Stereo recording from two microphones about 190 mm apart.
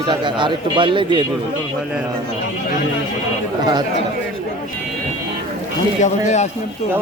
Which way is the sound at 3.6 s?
20° right (ahead or behind).